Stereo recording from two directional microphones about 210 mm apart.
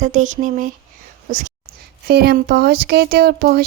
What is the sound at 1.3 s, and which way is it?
Speech, 35° right (ahead or behind).